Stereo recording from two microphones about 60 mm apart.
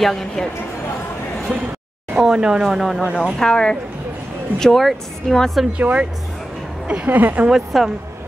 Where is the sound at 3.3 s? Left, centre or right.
Centre.